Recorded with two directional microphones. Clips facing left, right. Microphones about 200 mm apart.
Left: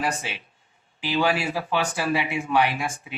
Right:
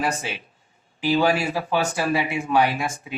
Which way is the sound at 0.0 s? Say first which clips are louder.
Right 2 dB; 40° right (ahead or behind).